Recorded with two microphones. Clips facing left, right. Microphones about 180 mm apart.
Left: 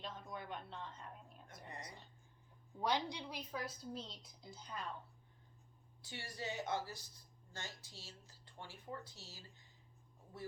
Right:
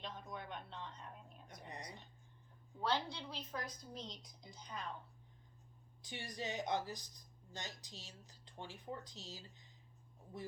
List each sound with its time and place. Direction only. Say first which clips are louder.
0.0 s speech: even; centre (ahead or behind)
1.6 s speech: right 1 dB; 20° right (ahead or behind)
2.8 s a woman's voice: left 1 dB; 15° left (ahead or behind)
6.0 s speech: right 2 dB; 15° right (ahead or behind)